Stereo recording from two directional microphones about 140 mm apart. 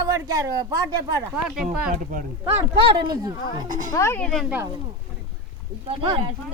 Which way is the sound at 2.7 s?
30° right (ahead or behind).